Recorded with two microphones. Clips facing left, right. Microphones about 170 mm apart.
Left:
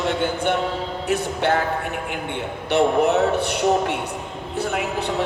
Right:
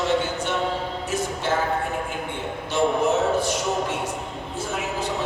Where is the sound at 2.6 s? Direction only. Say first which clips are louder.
Left 4 dB; 65° left (ahead or behind).